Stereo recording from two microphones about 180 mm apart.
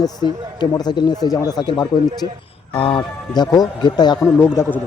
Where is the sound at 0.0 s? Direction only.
20° left (ahead or behind).